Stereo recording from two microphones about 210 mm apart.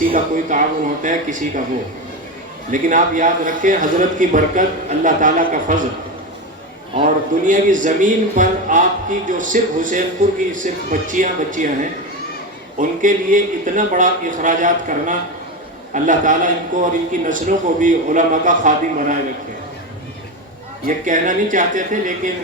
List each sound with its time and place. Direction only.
0.0 s a man's voice: 40° right (ahead or behind)
2.7 s a man's voice: 40° right (ahead or behind)
7.0 s a man's voice: 40° right (ahead or behind)
13.0 s a man's voice: 40° right (ahead or behind)
20.8 s a man's voice: 40° right (ahead or behind)